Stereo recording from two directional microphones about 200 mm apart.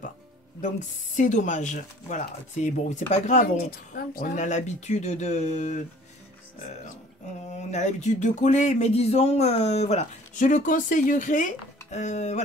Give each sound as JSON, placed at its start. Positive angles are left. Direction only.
{"t": 0.6, "sound": "speech", "side_deg": 35}
{"t": 7.7, "sound": "speech", "side_deg": 35}